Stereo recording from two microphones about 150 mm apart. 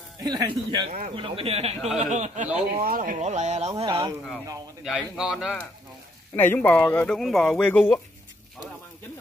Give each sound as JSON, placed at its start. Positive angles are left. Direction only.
{"t": 0.2, "sound": "a man's voice", "side_deg": -30}
{"t": 2.8, "sound": "speech", "side_deg": -70}
{"t": 3.8, "sound": "speech", "side_deg": -35}
{"t": 4.8, "sound": "a man's voice", "side_deg": -5}
{"t": 6.3, "sound": "speech", "side_deg": 15}
{"t": 7.2, "sound": "speech", "side_deg": 0}